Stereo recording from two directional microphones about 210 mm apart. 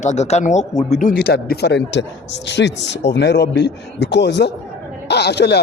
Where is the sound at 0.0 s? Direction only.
35° left (ahead or behind).